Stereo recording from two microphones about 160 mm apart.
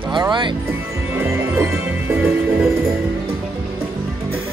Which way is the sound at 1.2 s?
15° right (ahead or behind).